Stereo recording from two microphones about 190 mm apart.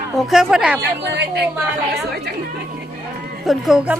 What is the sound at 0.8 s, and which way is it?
Speech, 65° right (ahead or behind).